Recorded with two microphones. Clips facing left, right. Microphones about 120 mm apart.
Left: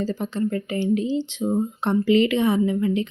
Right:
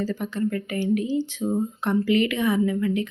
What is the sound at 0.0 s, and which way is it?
Speech, 30° left (ahead or behind).